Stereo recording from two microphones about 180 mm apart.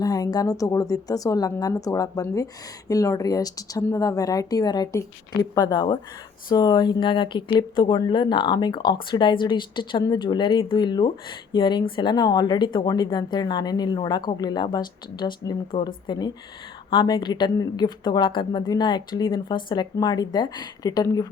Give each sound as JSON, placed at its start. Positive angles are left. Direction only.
{"t": 0.0, "sound": "speech", "side_deg": 20}